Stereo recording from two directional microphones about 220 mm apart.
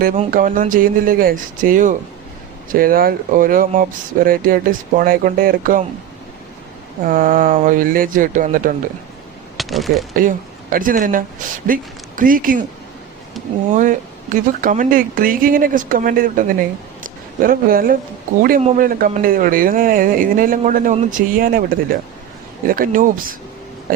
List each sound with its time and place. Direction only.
0.3 s a man's voice: 40° right (ahead or behind)
7.0 s a man's voice: 40° right (ahead or behind)
9.6 s speech: centre (ahead or behind)
10.2 s speech: 40° right (ahead or behind)
13.7 s a man's voice: 35° right (ahead or behind)
17.0 s a sound: 40° right (ahead or behind)
18.3 s a man's voice: 40° right (ahead or behind)